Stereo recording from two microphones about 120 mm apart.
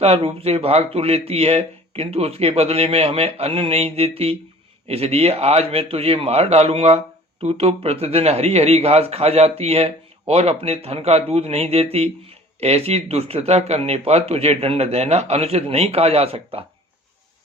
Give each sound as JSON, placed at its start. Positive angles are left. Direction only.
{"t": 0.0, "sound": "a man's voice", "side_deg": -55}